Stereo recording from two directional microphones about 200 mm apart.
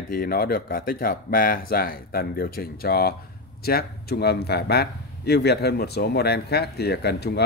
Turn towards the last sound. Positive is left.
turn(degrees=55)  # may be behind; listen again after turning